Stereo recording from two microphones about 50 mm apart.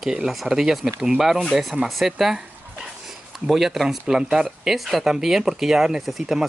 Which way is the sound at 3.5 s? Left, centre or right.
Centre.